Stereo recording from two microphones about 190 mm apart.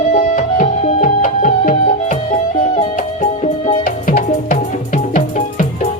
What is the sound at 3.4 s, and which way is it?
Music, 40° left (ahead or behind).